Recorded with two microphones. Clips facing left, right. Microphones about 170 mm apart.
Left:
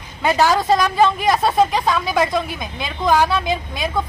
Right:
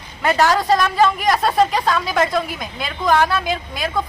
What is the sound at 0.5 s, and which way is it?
Speech, 15° left (ahead or behind).